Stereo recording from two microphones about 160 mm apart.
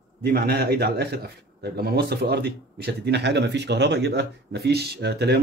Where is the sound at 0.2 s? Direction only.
80° right.